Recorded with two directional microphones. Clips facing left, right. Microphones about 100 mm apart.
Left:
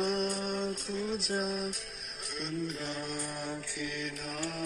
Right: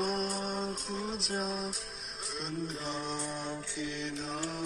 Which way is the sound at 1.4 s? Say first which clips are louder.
Left 1 dB; 35° right (ahead or behind).